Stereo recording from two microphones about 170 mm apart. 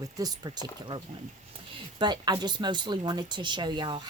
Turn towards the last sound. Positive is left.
turn(degrees=-25)  # may be behind; listen again after turning